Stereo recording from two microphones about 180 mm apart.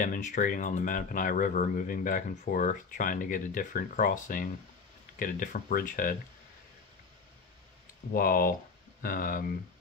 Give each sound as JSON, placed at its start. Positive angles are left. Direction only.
{"t": 0.0, "sound": "speech", "side_deg": 45}
{"t": 8.1, "sound": "speech", "side_deg": 55}